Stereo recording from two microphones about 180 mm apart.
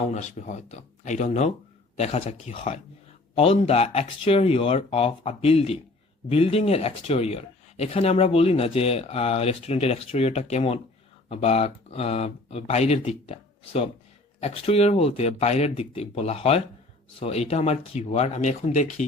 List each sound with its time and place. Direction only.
0.1 s speech: 40° left (ahead or behind)